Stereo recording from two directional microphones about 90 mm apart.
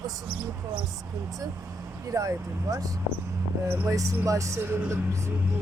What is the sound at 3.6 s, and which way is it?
Speech, 25° right (ahead or behind).